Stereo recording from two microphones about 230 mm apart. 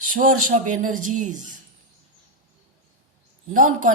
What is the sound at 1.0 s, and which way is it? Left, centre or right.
Speech, right.